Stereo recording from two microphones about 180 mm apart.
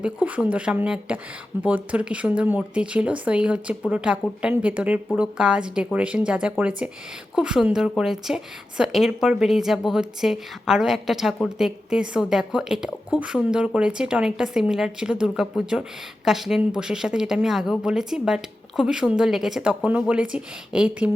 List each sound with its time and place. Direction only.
0.0 s a woman's voice: 5° right (ahead or behind)